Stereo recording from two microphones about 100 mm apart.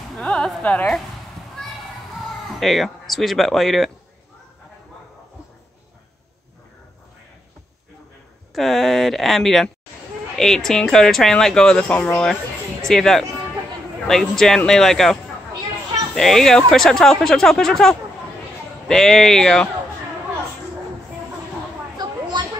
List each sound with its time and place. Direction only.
0.2 s a sound: 10° left (ahead or behind)
0.6 s a woman's voice: 10° left (ahead or behind)
2.6 s speech: centre (ahead or behind)
8.5 s speech: centre (ahead or behind)
12.8 s speech: 5° left (ahead or behind)
16.2 s speech: 5° left (ahead or behind)
21.9 s a sound: 45° right (ahead or behind)